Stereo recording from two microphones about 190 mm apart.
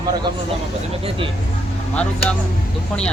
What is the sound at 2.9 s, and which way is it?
Speech, 5° left (ahead or behind).